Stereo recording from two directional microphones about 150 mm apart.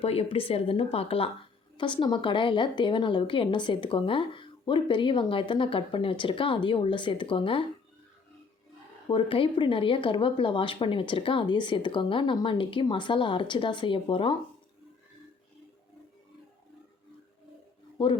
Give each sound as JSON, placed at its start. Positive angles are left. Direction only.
{"t": 0.0, "sound": "a woman's voice", "side_deg": 40}
{"t": 9.0, "sound": "a woman's voice", "side_deg": 35}
{"t": 17.9, "sound": "a sound", "side_deg": 35}